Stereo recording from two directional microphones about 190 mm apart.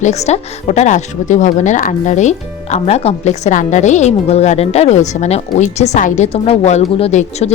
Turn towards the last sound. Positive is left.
turn(degrees=35)  # may be behind; listen again after turning